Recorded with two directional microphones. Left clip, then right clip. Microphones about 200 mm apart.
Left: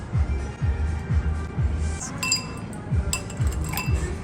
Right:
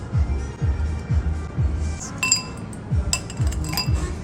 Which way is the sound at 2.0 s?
Centre (ahead or behind).